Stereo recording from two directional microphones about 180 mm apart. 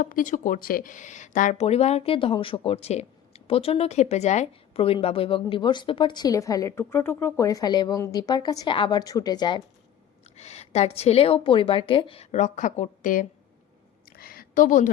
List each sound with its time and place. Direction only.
0.0 s speech: 50° left (ahead or behind); by 9.6 s 25° left (ahead or behind)
10.3 s a woman's voice: 35° left (ahead or behind)
14.2 s a sound: 55° left (ahead or behind)